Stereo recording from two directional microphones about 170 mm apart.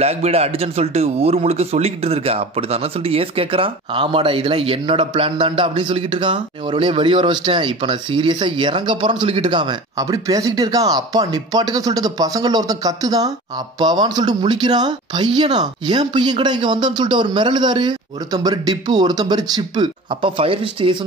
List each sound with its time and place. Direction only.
0.0 s speech: 40° right (ahead or behind)